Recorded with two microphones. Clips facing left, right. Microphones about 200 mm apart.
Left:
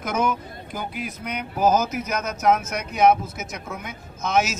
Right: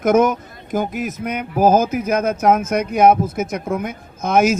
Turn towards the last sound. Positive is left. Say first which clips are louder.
# right 7 dB
turn(degrees=-55)  # may be behind; listen again after turning